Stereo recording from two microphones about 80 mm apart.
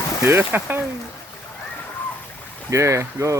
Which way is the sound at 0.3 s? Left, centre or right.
Right.